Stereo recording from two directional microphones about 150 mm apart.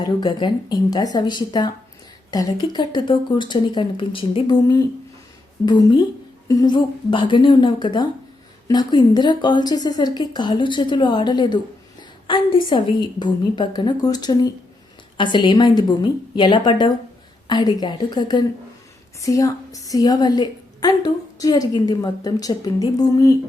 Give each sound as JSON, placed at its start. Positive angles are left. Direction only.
{"t": 0.0, "sound": "speech", "side_deg": 30}